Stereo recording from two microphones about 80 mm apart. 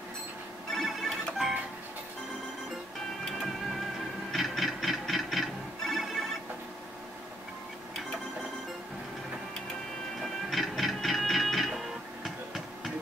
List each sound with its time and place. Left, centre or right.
0.7 s music: centre
4.3 s music: centre
10.5 s music: centre